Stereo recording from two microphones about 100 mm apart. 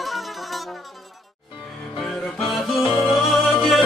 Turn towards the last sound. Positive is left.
turn(degrees=0)  # may be behind; listen again after turning